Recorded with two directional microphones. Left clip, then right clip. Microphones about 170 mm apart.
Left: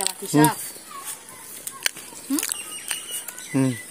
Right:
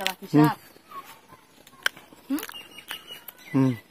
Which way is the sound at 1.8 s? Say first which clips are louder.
Even; 5° right (ahead or behind).